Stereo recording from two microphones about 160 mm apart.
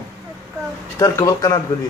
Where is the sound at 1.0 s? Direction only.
20° left (ahead or behind).